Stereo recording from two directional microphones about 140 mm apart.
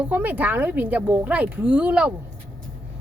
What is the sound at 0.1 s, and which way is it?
Speech, 10° right (ahead or behind).